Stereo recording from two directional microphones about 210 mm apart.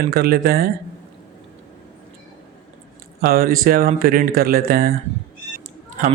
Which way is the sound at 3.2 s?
45° right (ahead or behind).